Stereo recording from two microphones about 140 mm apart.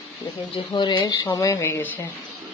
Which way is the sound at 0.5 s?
35° left (ahead or behind).